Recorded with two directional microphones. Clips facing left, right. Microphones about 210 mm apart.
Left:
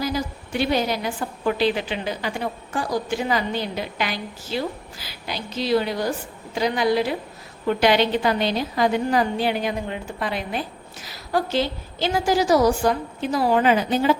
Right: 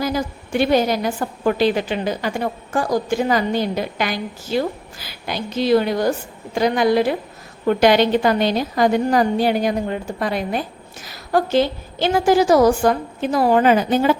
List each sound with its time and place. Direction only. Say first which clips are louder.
0.0 s a woman's voice: right 3 dB; 50° right (ahead or behind)